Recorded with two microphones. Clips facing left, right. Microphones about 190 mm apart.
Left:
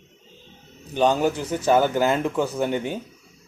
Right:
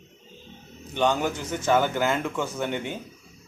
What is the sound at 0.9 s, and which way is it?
A man's voice, 35° left (ahead or behind).